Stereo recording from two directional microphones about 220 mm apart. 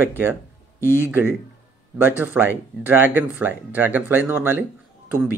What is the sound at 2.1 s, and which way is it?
Speech, 10° right (ahead or behind).